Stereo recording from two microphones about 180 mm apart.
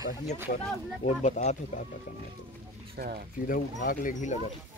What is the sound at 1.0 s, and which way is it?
Speech, 40° left (ahead or behind).